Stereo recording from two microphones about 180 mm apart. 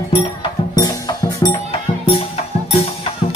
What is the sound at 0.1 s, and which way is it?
Music, 25° left (ahead or behind).